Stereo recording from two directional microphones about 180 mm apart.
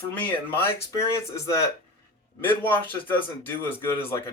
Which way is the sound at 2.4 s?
10° left (ahead or behind).